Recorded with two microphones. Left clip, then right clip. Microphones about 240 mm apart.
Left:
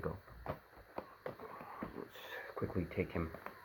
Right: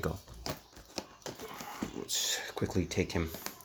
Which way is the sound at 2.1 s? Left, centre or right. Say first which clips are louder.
Right 13 dB; right.